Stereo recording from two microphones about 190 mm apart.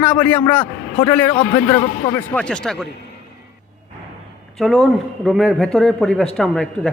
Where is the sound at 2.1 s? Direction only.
10° left (ahead or behind).